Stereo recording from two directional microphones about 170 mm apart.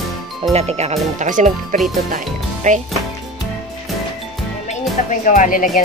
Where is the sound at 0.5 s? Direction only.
40° right (ahead or behind).